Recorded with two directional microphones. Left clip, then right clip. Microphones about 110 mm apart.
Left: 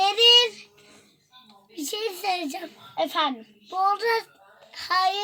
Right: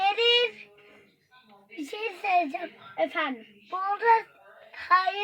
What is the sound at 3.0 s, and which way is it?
Speech, 25° left (ahead or behind).